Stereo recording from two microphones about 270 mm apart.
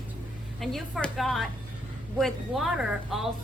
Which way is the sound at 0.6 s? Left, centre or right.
Centre.